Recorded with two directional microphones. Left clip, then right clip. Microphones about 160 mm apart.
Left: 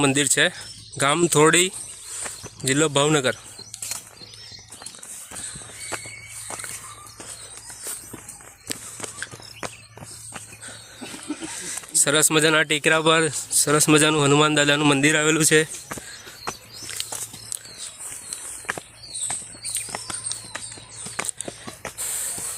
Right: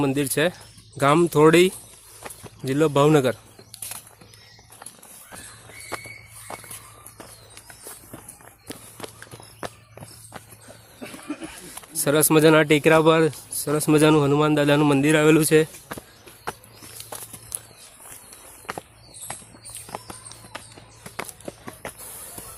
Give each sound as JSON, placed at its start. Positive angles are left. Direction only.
{"t": 0.0, "sound": "speech", "side_deg": 0}
{"t": 2.3, "sound": "a sound", "side_deg": 0}
{"t": 2.6, "sound": "speech", "side_deg": -5}
{"t": 8.7, "sound": "a sound", "side_deg": -20}
{"t": 9.6, "sound": "cricket", "side_deg": 10}
{"t": 11.3, "sound": "speech", "side_deg": -5}
{"t": 17.0, "sound": "biting", "side_deg": 0}
{"t": 18.3, "sound": "walk", "side_deg": 0}
{"t": 19.9, "sound": "clip-clop", "side_deg": -5}
{"t": 21.4, "sound": "a sound", "side_deg": 0}